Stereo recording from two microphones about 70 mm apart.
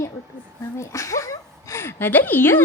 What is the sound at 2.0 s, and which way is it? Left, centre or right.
Speech, left.